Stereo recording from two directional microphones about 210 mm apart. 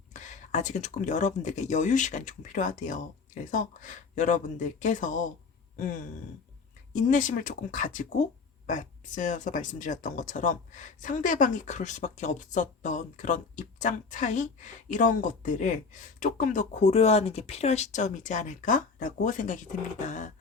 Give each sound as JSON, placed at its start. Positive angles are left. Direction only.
{"t": 0.1, "sound": "speech", "side_deg": 35}
{"t": 7.1, "sound": "speech", "side_deg": 40}